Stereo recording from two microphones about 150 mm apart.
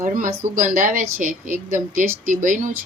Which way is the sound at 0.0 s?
60° right (ahead or behind).